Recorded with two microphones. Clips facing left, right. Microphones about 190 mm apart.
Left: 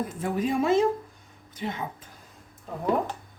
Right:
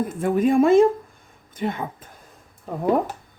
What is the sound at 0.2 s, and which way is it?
Speech, 50° right (ahead or behind).